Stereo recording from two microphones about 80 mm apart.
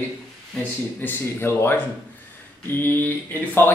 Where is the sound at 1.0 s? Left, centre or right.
Left.